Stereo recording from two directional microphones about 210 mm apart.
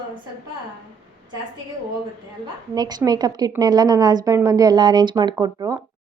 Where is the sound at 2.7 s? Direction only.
20° right (ahead or behind).